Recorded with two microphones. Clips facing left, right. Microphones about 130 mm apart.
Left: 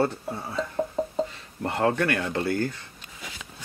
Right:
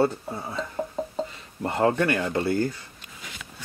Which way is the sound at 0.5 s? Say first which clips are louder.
Left 4 dB; centre (ahead or behind).